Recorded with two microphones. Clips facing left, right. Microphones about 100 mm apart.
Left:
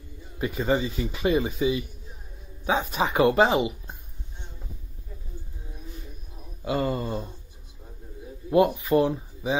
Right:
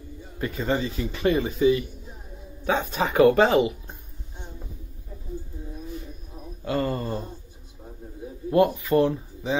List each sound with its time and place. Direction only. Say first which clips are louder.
0.4 s speech: left 1 dB; 15° left (ahead or behind)
6.6 s speech: even; 10° left (ahead or behind)
8.5 s speech: even; 15° left (ahead or behind)